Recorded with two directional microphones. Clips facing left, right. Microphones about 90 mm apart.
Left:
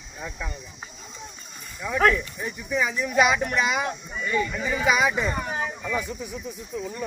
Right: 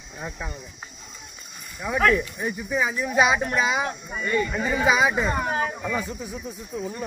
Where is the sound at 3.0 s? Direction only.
35° right (ahead or behind).